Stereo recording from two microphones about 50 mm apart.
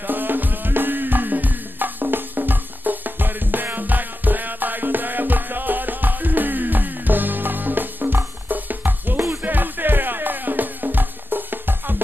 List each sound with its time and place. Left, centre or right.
0.0 s music: right